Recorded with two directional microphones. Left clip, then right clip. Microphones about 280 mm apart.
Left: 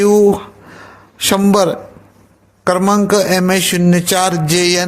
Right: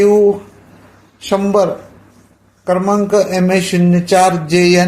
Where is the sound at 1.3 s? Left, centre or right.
Left.